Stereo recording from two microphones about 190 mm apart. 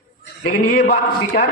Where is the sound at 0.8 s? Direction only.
40° left (ahead or behind).